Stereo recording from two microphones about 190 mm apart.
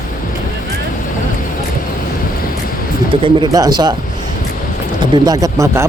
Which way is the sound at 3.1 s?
25° right (ahead or behind).